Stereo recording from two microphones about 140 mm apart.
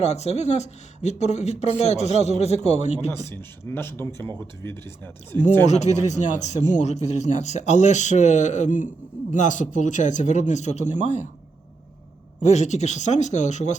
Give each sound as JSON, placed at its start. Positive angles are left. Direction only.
{"t": 0.0, "sound": "speech", "side_deg": 50}
{"t": 3.2, "sound": "speech", "side_deg": 15}
{"t": 5.6, "sound": "speech", "side_deg": 55}
{"t": 12.5, "sound": "speech", "side_deg": 55}